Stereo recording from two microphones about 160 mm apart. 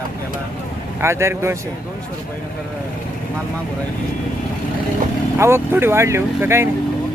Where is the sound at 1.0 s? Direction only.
15° right (ahead or behind).